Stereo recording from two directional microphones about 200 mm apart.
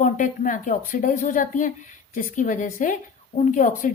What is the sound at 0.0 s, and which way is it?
A woman's voice, 40° left (ahead or behind).